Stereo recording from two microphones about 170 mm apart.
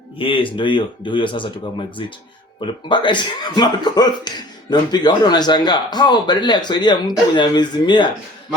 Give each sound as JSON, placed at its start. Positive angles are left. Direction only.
{"t": 0.2, "sound": "speech", "side_deg": 30}